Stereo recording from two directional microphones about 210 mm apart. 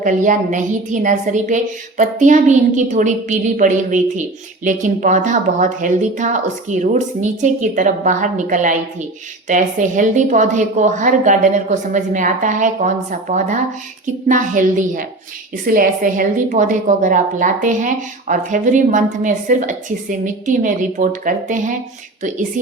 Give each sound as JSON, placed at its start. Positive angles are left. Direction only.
{"t": 0.0, "sound": "a woman's voice", "side_deg": -35}